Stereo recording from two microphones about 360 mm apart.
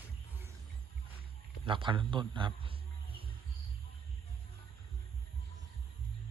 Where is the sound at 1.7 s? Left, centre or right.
Centre.